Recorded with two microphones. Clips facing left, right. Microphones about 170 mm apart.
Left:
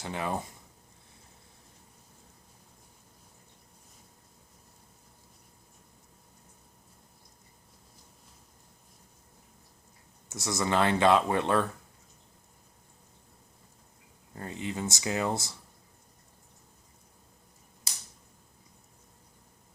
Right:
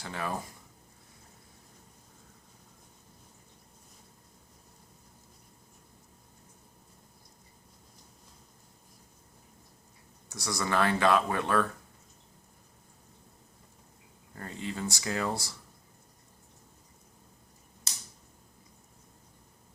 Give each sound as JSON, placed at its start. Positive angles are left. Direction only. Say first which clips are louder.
{"t": 0.0, "sound": "speech", "louder": "left 2 dB", "side_deg": 20}
{"t": 10.2, "sound": "speech", "louder": "left 3 dB", "side_deg": 25}
{"t": 14.3, "sound": "speech", "louder": "left 2 dB", "side_deg": 20}